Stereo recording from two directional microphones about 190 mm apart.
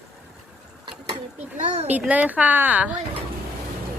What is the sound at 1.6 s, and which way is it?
Speech, 40° right (ahead or behind).